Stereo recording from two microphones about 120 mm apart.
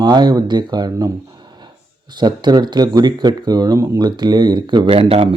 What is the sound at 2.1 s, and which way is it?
Speech, 35° right (ahead or behind).